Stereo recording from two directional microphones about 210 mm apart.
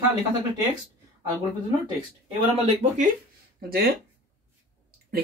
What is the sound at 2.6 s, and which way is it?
Speech, 30° right (ahead or behind).